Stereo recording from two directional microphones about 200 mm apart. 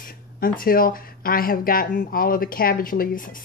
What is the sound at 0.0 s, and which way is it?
Speech, 45° left (ahead or behind).